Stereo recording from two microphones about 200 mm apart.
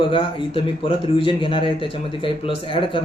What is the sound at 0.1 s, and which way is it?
A man's voice, 25° left (ahead or behind).